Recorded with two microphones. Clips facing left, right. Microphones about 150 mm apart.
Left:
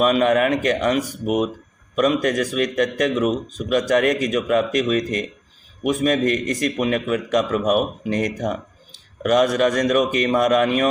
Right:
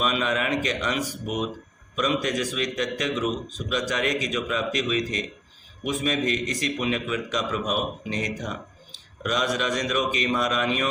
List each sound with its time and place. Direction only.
0.0 s a man's voice: 50° left (ahead or behind)